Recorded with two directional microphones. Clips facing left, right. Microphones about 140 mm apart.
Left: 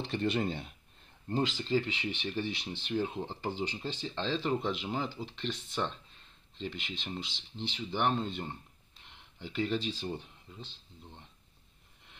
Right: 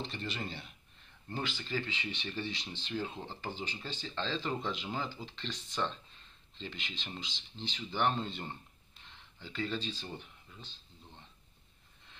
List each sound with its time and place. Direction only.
0.0 s speech: 60° left (ahead or behind)
1.3 s speech: 30° left (ahead or behind)
1.9 s speech: 70° left (ahead or behind)
2.2 s speech: 10° left (ahead or behind)
9.9 s speech: 25° left (ahead or behind)